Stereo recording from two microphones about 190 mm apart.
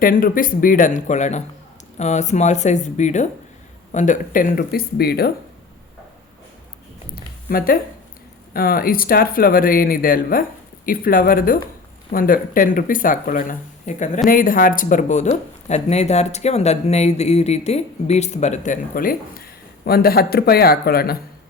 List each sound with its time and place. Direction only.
0.0 s speech: 50° left (ahead or behind)
7.5 s speech: 50° left (ahead or behind)